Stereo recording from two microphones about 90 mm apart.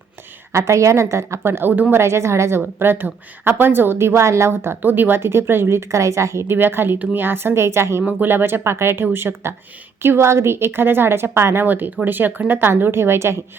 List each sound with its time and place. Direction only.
0.5 s a woman's voice: 35° right (ahead or behind)